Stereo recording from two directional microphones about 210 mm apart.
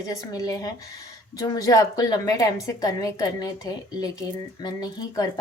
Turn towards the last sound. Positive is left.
turn(degrees=20)  # may be behind; listen again after turning